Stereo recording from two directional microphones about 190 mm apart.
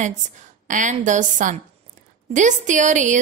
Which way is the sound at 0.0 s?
40° right (ahead or behind).